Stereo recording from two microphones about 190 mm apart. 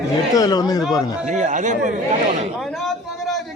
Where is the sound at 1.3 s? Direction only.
40° right (ahead or behind).